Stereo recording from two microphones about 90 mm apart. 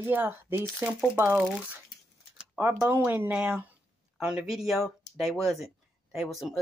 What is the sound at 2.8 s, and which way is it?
Speech, 25° right (ahead or behind).